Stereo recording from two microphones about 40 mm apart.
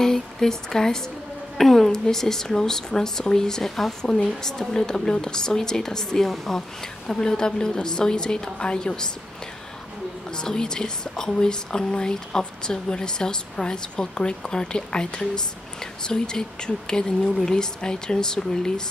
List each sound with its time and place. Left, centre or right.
0.0 s speech: centre
10.3 s speech: centre